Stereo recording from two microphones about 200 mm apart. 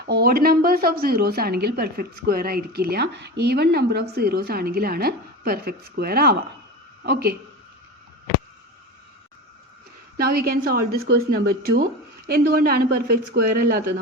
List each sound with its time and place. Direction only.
0.0 s a woman's voice: 50° right (ahead or behind)
10.2 s a woman's voice: 50° right (ahead or behind)